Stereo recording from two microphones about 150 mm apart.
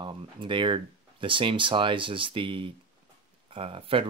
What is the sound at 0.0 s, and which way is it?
Speech, 30° right (ahead or behind).